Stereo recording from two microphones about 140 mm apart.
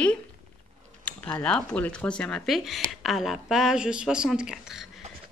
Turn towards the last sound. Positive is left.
turn(degrees=-5)  # may be behind; listen again after turning